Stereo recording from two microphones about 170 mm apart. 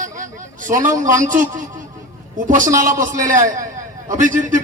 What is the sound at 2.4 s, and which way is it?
Speech, 50° right (ahead or behind).